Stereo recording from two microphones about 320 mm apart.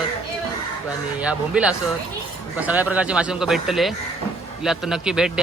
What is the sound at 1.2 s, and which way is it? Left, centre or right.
A man's voice, centre.